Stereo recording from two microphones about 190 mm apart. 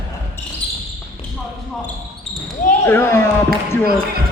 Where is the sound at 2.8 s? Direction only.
10° left (ahead or behind).